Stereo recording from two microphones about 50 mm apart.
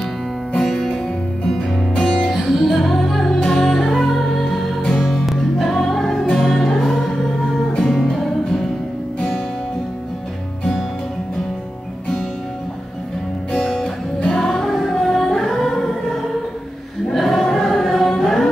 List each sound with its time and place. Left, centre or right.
0.6 s music: centre
13.5 s music: centre
17.1 s choir: centre
18.2 s music: centre